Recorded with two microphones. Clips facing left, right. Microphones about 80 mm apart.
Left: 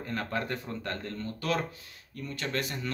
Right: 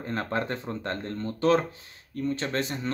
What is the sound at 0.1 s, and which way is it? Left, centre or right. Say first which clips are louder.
Speech: right 4 dB; right.